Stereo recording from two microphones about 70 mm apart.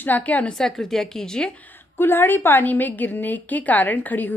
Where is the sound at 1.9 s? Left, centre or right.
Left.